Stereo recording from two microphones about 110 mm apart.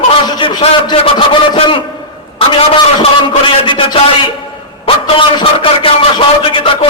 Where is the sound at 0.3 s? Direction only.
50° left (ahead or behind).